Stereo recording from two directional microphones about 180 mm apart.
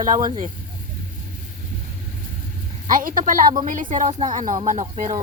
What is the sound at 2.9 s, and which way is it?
A woman's voice, 50° right (ahead or behind).